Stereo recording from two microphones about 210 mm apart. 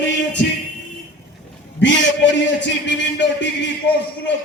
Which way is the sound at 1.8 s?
55° left (ahead or behind).